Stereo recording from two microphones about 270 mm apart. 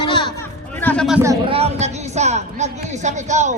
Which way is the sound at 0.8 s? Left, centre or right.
Centre.